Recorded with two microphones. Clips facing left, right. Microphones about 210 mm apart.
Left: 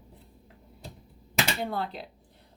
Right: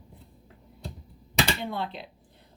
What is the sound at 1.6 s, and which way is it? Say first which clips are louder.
Speech: left 1 dB; 40° left (ahead or behind).